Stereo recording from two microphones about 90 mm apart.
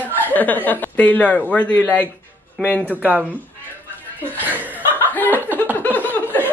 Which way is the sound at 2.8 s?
20° right (ahead or behind).